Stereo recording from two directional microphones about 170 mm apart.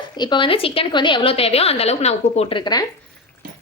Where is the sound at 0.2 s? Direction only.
30° left (ahead or behind).